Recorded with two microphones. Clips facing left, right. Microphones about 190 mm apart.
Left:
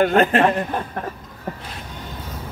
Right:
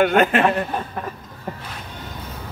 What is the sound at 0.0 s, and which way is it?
Speech, 35° left (ahead or behind).